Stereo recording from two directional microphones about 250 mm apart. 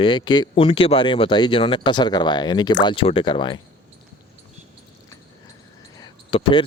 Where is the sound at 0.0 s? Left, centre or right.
Centre.